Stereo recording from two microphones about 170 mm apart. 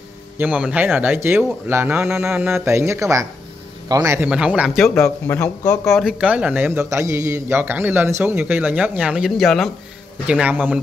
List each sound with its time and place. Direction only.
0.4 s a man's voice: 5° right (ahead or behind)
4.9 s speech: 15° left (ahead or behind)
5.7 s a man's voice: centre (ahead or behind)